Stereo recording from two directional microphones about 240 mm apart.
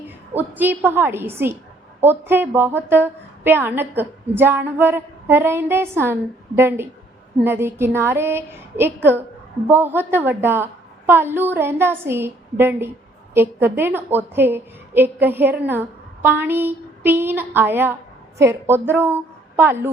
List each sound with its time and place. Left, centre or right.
0.3 s a woman's voice: centre